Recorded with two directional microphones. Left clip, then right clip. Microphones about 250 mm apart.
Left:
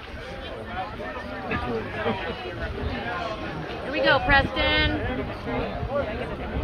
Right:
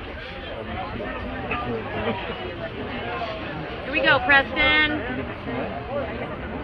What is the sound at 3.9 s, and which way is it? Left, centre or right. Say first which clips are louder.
Speech: right 2 dB; centre.